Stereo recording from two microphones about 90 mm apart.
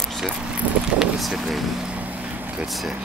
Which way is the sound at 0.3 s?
15° right (ahead or behind).